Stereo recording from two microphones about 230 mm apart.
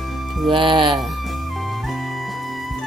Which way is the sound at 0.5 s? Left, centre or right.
Right.